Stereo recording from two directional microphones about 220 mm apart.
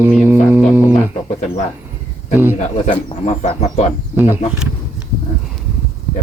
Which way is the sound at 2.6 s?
25° left (ahead or behind).